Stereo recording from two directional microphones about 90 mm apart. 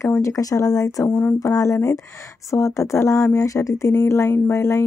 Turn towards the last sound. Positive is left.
turn(degrees=35)  # may be behind; listen again after turning